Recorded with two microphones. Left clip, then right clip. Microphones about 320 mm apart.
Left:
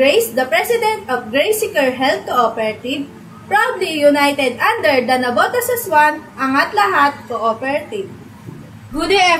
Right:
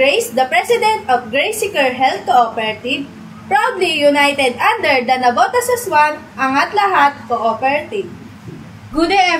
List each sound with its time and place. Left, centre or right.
0.0 s a woman's voice: centre
9.1 s a man's voice: centre